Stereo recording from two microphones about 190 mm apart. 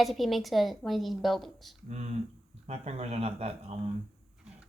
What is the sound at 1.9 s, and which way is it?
Speech, 35° right (ahead or behind).